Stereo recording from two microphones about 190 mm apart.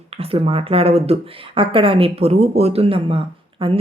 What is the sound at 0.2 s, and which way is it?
Speech, 30° right (ahead or behind).